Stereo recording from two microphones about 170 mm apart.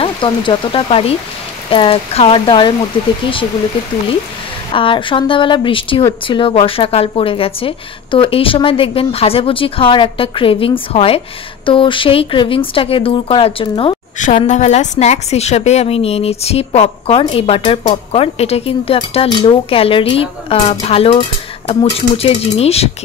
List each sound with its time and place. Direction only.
0.0 s a woman's voice: 30° left (ahead or behind)
4.7 s a woman's voice: 30° left (ahead or behind)
14.1 s a woman's voice: 45° left (ahead or behind)